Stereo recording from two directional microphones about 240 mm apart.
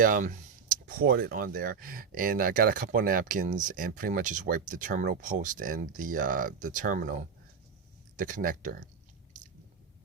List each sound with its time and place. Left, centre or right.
0.0 s speech: right